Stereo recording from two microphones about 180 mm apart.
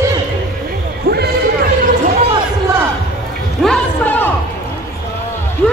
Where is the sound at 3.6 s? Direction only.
5° left (ahead or behind).